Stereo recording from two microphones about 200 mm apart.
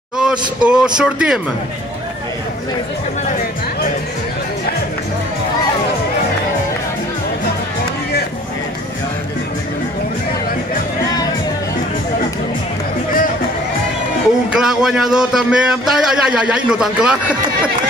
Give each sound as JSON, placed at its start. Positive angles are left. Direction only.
{"t": 0.2, "sound": "a man's voice", "side_deg": -5}
{"t": 3.3, "sound": "music", "side_deg": 40}
{"t": 14.6, "sound": "a man's voice", "side_deg": 0}